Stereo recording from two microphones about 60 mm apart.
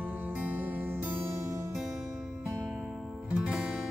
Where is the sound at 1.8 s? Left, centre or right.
Centre.